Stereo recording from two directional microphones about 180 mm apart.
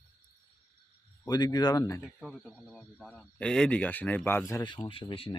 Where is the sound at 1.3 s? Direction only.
20° left (ahead or behind).